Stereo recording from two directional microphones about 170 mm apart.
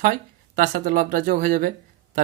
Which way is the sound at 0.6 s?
55° right (ahead or behind).